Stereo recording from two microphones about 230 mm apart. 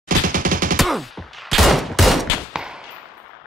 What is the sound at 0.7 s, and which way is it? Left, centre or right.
Fusillade, centre.